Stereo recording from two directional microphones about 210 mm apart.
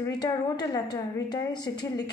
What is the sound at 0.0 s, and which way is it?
A woman's voice, 15° left (ahead or behind).